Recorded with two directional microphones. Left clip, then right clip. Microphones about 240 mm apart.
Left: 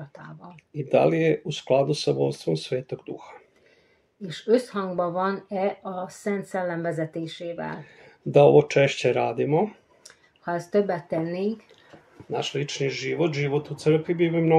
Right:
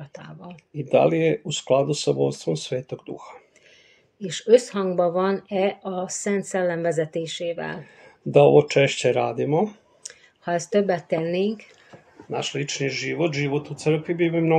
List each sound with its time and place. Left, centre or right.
0.1 s a sound: right
0.7 s speech: centre
4.6 s speech: right
7.8 s speech: centre
10.7 s speech: right
12.3 s speech: centre